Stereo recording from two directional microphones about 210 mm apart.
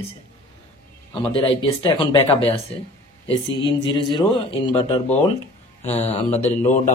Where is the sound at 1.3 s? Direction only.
25° left (ahead or behind).